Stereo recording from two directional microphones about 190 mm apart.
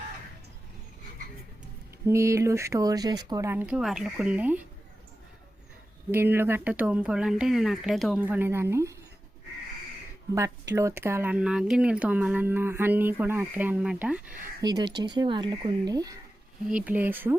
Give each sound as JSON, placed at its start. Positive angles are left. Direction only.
{"t": 2.0, "sound": "speech", "side_deg": -15}
{"t": 6.1, "sound": "speech", "side_deg": -10}
{"t": 10.3, "sound": "speech", "side_deg": -15}
{"t": 14.6, "sound": "speech", "side_deg": -20}
{"t": 16.6, "sound": "speech", "side_deg": -5}